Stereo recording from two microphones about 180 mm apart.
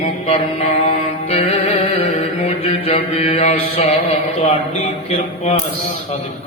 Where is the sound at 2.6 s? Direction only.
35° left (ahead or behind).